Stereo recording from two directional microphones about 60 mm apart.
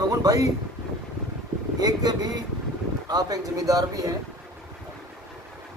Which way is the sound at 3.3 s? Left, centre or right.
Right.